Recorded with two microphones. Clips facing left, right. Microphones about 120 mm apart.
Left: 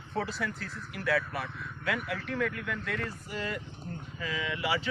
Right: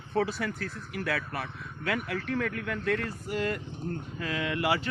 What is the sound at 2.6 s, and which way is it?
Speech, 55° right (ahead or behind).